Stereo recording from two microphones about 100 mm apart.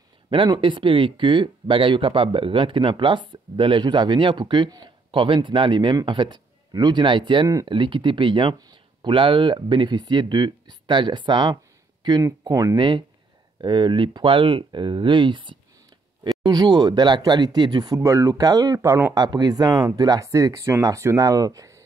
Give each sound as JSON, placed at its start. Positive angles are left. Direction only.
{"t": 0.3, "sound": "speech", "side_deg": -55}
{"t": 12.2, "sound": "speech", "side_deg": -35}
{"t": 12.7, "sound": "speech", "side_deg": -50}
{"t": 18.0, "sound": "speech", "side_deg": -30}
{"t": 19.1, "sound": "speech", "side_deg": -45}